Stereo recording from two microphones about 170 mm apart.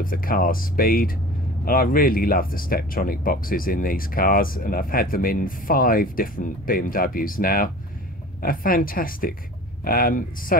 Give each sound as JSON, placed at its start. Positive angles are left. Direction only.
{"t": 0.0, "sound": "speech", "side_deg": 55}